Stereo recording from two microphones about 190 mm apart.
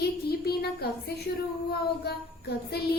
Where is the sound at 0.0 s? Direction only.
55° left (ahead or behind).